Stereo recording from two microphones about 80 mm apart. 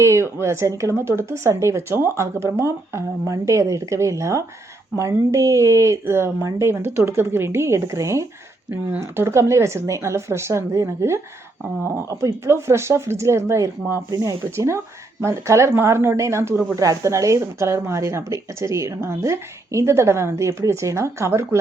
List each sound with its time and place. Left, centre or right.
0.0 s speech: right
14.1 s speech: right
14.5 s speech: right